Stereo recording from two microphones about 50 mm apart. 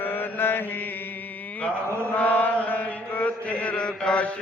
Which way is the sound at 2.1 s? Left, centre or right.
Left.